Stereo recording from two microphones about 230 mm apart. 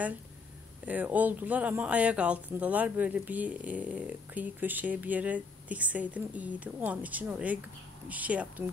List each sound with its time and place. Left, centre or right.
0.8 s speech: centre